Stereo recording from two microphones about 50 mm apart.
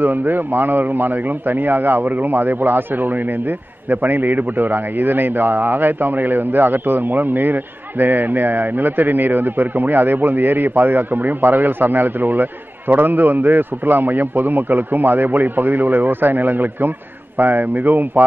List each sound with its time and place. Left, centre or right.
0.0 s a man's voice: right